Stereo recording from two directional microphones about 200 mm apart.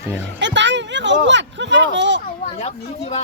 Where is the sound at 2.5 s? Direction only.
30° left (ahead or behind).